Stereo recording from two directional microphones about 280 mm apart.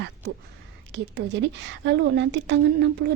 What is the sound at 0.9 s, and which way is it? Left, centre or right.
A woman's voice, right.